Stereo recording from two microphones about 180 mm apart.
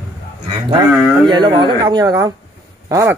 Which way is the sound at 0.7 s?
25° right (ahead or behind).